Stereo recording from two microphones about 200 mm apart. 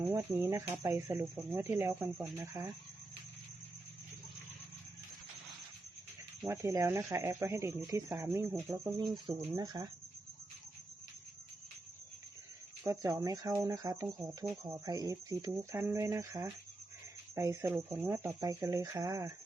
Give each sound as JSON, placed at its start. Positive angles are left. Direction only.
{"t": 0.0, "sound": "speech", "side_deg": -15}
{"t": 6.5, "sound": "speech", "side_deg": -15}
{"t": 12.8, "sound": "speech", "side_deg": -15}